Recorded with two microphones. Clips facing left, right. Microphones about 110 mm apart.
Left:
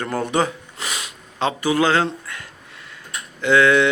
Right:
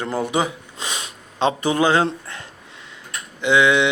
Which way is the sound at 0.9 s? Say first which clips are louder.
Even; 25° right (ahead or behind).